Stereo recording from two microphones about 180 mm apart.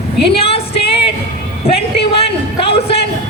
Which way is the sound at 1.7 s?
30° left (ahead or behind).